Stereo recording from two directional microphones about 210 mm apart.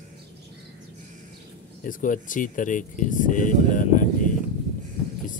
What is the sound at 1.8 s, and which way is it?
Speech, 40° left (ahead or behind).